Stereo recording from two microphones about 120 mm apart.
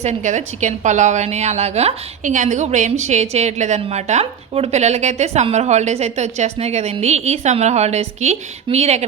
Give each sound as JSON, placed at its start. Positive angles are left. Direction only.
{"t": 0.0, "sound": "a woman's voice", "side_deg": -80}